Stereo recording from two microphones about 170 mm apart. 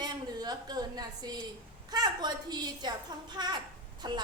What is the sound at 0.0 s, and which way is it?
A woman's voice, 25° right (ahead or behind).